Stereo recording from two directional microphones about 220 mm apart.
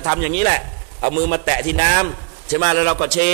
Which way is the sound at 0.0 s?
15° right (ahead or behind).